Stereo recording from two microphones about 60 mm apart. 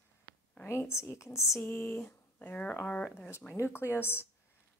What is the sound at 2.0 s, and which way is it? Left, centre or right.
A woman's voice, left.